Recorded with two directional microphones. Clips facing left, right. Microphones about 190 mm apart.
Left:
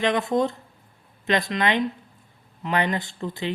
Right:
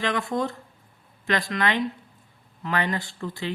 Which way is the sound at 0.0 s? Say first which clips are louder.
Left 4 dB; 20° left (ahead or behind).